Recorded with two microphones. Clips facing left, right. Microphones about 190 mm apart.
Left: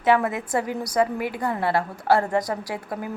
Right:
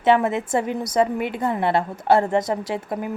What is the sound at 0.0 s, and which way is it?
A woman's voice, 25° right (ahead or behind).